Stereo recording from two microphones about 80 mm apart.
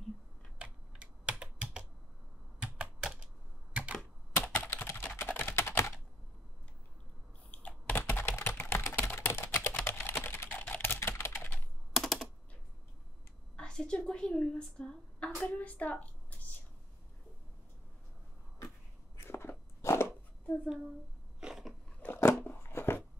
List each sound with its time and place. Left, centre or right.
0.6 s computer keyboard: centre
2.6 s typing: centre
3.7 s typewriter: centre
4.4 s computer keyboard: left
4.8 s typing: left
7.9 s typing: left
11.9 s typing: centre
13.6 s a woman's voice: centre
19.1 s a sound: left
21.4 s biting: centre
22.0 s a sound: left